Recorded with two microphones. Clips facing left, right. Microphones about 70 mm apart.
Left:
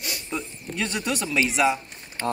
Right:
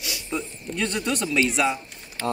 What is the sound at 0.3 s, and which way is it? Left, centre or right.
Speech, centre.